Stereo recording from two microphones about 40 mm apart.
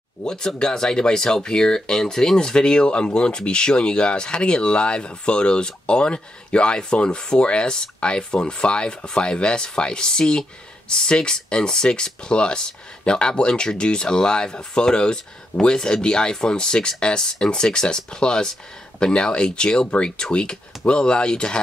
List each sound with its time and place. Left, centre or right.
0.2 s speech: centre